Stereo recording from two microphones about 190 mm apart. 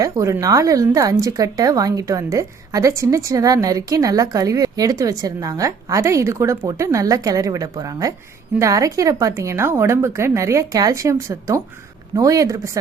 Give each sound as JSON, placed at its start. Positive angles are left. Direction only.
{"t": 0.0, "sound": "speech", "side_deg": -15}